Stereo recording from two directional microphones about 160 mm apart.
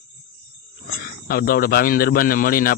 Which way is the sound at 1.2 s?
65° left (ahead or behind).